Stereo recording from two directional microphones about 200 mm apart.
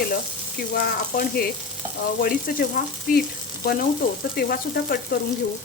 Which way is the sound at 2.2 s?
45° left (ahead or behind).